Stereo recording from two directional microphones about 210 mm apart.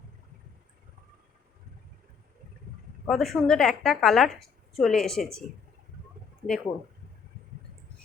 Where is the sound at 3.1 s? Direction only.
Centre (ahead or behind).